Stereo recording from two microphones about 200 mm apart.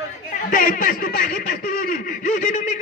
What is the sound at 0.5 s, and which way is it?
Speech, 45° left (ahead or behind).